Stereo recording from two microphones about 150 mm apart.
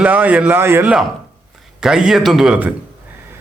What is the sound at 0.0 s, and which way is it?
Speech, 10° right (ahead or behind).